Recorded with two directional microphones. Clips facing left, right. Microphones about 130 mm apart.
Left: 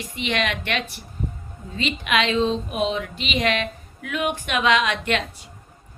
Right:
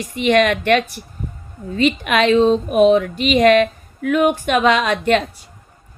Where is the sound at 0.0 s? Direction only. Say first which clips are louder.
Right 10 dB; 45° right (ahead or behind).